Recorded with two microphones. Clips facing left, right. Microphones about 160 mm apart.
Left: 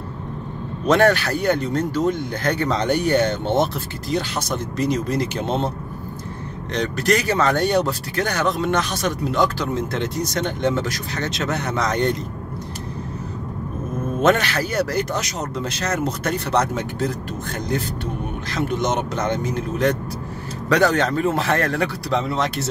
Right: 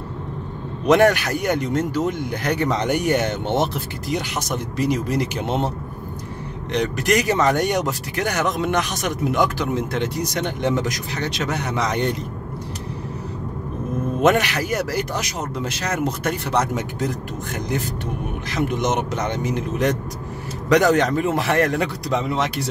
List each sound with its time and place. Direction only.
0.8 s speech: 15° right (ahead or behind)
6.7 s speech: 15° right (ahead or behind)
14.2 s speech: 15° right (ahead or behind)